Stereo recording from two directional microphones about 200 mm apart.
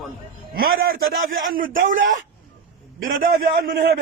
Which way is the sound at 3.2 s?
50° right (ahead or behind).